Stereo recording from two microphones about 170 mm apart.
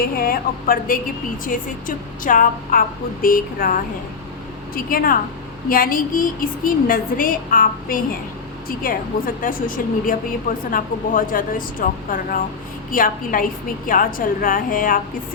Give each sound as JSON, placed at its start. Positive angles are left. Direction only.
{"t": 0.0, "sound": "a woman's voice", "side_deg": 60}